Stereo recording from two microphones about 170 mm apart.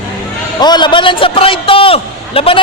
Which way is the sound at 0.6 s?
25° left (ahead or behind).